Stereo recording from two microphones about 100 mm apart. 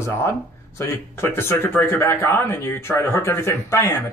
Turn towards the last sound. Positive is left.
turn(degrees=25)  # may be behind; listen again after turning